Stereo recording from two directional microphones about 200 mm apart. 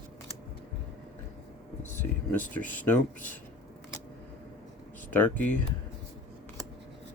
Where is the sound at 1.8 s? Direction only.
10° left (ahead or behind).